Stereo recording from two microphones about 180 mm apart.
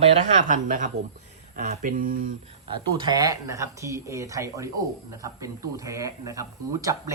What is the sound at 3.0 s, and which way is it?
Speech, 20° right (ahead or behind).